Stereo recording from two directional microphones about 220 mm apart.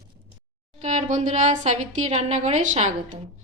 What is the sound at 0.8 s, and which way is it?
A woman's voice, 35° right (ahead or behind).